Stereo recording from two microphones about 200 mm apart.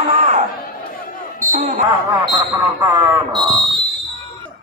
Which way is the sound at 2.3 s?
15° right (ahead or behind).